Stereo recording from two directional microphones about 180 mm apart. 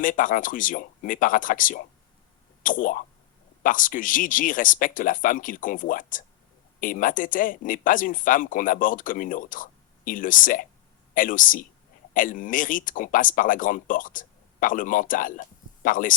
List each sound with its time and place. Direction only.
0.0 s speech: 50° left (ahead or behind)